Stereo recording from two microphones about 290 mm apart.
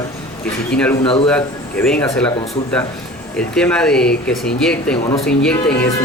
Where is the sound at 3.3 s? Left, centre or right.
Centre.